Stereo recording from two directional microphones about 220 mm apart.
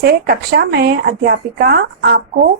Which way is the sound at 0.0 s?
45° right (ahead or behind).